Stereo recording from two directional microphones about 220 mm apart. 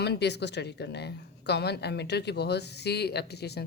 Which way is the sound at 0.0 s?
50° left (ahead or behind).